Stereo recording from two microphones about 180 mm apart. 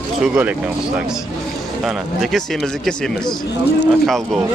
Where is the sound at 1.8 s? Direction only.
Centre (ahead or behind).